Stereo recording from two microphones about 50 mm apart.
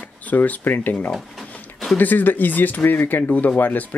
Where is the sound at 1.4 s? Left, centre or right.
Left.